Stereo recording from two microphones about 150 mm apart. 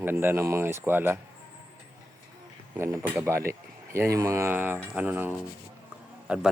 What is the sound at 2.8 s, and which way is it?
Speech, 15° right (ahead or behind).